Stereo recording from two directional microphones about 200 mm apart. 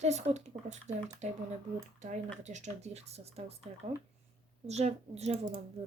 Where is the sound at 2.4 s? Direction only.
35° right (ahead or behind).